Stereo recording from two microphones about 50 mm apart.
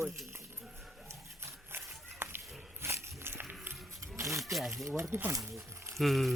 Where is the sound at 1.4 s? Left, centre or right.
Right.